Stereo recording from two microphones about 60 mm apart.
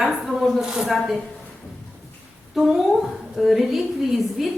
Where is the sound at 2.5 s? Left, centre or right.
Centre.